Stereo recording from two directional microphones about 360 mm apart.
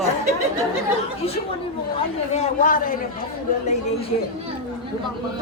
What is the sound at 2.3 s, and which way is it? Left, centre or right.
Speech, left.